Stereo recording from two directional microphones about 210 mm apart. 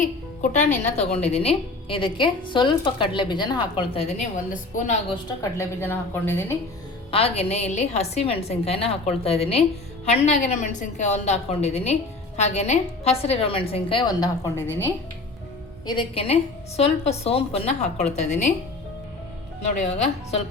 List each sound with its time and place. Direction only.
0.0 s a woman's voice: 35° left (ahead or behind)
5.0 s a woman's voice: 15° left (ahead or behind)
7.1 s a woman's voice: 30° left (ahead or behind); by 14.8 s 10° left (ahead or behind)
15.9 s a woman's voice: 25° left (ahead or behind)
19.6 s a woman's voice: 35° left (ahead or behind)